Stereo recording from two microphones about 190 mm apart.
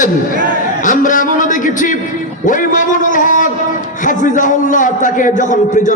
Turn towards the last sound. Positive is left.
turn(degrees=40)  # may be behind; listen again after turning